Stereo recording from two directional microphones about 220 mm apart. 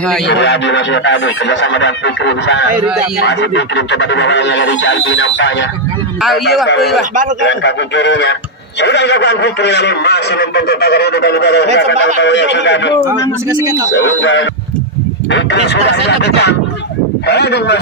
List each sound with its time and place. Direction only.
0.3 s speech: 50° left (ahead or behind)
7.4 s speech: 55° left (ahead or behind)
13.5 s a man's voice: 15° right (ahead or behind)
13.9 s speech: 55° left (ahead or behind)